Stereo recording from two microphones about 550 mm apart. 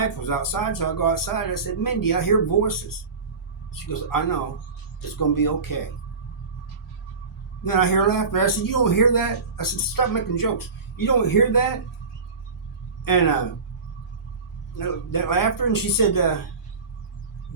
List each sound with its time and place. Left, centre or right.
0.3 s speech: left
4.1 s speech: left
7.6 s speech: left
13.1 s speech: left
14.8 s speech: left